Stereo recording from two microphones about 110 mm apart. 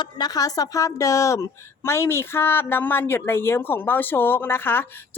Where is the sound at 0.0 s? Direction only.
35° left (ahead or behind).